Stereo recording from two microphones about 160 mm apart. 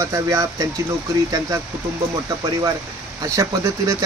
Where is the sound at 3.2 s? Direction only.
20° right (ahead or behind).